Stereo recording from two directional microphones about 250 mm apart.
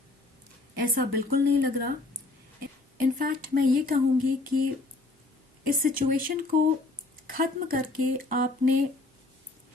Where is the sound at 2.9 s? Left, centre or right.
Right.